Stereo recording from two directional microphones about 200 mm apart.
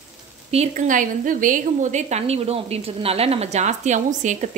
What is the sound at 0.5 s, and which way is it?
A woman's voice, 35° right (ahead or behind).